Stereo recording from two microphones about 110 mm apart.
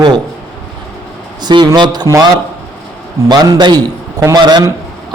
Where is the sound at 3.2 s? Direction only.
40° right (ahead or behind).